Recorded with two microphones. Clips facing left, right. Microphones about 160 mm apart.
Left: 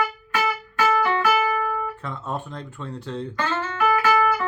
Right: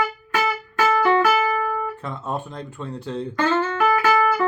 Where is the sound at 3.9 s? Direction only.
40° right (ahead or behind).